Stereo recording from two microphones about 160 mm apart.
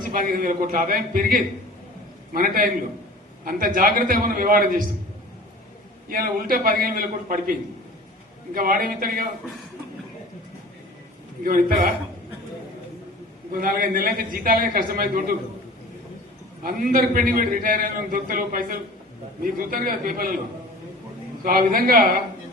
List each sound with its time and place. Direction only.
0.0 s a man's voice: 60° right (ahead or behind)
6.1 s a man's voice: 65° right (ahead or behind)
8.5 s a man's voice: 65° right (ahead or behind)
11.4 s a man's voice: 60° right (ahead or behind)
13.5 s a man's voice: 60° right (ahead or behind)
16.6 s a man's voice: 65° right (ahead or behind)
21.4 s a man's voice: 65° right (ahead or behind)